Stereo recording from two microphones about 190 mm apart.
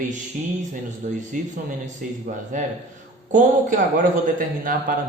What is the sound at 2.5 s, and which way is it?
A man's voice, 40° right (ahead or behind).